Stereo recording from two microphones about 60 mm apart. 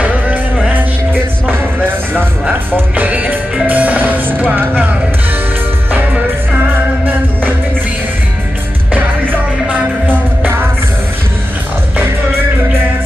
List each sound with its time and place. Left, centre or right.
0.0 s music: right
1.1 s music: right
8.9 s music: right